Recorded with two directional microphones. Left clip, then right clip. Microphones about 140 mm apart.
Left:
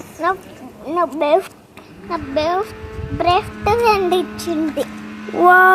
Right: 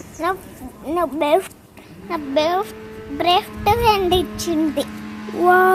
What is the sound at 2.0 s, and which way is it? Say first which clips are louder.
A woman's voice: even; 45° right (ahead or behind).